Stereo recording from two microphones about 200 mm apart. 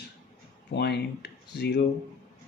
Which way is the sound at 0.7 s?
55° left (ahead or behind).